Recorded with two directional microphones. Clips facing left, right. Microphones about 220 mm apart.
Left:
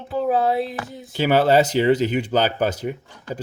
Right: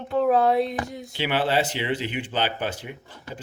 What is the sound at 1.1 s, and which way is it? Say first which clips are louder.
Speech: left 8 dB; 40° left (ahead or behind).